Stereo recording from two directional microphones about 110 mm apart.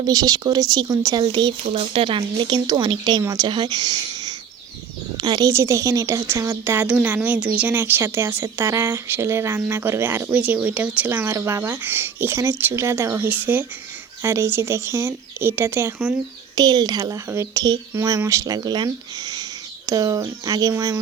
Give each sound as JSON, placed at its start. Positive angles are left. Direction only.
{"t": 0.0, "sound": "speech", "side_deg": -35}
{"t": 1.6, "sound": "a woman's voice", "side_deg": -65}
{"t": 16.6, "sound": "a woman's voice", "side_deg": -35}
{"t": 19.9, "sound": "speech", "side_deg": -30}